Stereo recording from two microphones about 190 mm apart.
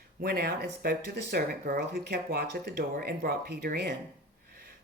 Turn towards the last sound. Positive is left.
turn(degrees=-55)  # may be behind; listen again after turning